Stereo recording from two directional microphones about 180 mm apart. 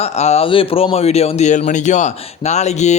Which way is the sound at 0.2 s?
35° left (ahead or behind).